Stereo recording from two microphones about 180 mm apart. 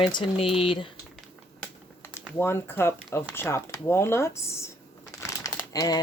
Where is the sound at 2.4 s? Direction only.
15° left (ahead or behind).